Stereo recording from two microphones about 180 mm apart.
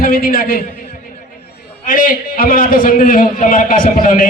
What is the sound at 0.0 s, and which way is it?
Speech, 55° left (ahead or behind).